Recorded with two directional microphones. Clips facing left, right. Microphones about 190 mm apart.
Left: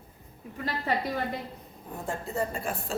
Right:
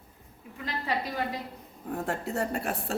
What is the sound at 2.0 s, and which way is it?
Speech, 70° right (ahead or behind).